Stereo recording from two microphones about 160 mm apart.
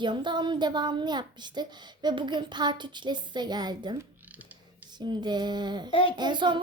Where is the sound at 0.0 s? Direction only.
30° right (ahead or behind).